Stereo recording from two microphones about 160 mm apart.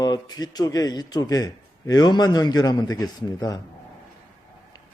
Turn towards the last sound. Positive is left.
turn(degrees=25)  # may be behind; listen again after turning